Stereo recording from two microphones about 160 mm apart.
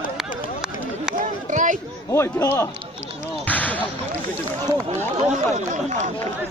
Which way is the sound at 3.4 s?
10° left (ahead or behind).